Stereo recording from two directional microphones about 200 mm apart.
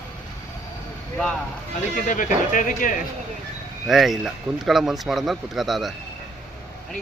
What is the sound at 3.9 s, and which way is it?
Speech, centre (ahead or behind).